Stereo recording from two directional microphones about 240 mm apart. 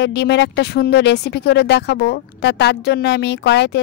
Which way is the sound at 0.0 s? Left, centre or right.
Left.